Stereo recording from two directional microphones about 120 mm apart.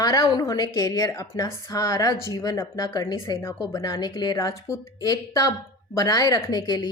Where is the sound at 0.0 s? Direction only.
30° left (ahead or behind).